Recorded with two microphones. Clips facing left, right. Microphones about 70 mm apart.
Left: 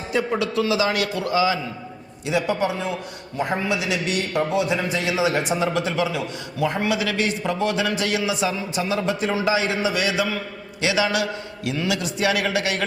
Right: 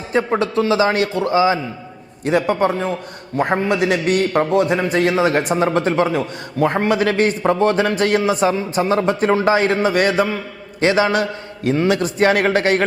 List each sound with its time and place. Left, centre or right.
0.1 s a man's voice: right
2.2 s a man's voice: right